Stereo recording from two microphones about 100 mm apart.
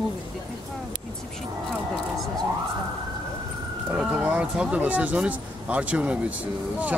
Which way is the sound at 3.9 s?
5° right (ahead or behind).